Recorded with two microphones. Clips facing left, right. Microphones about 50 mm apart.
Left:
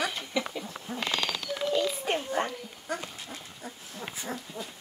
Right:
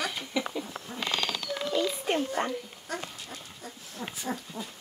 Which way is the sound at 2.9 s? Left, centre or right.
Centre.